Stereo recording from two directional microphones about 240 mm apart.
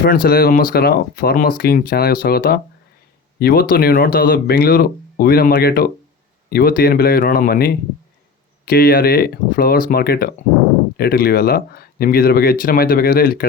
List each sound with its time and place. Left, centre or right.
0.0 s speech: left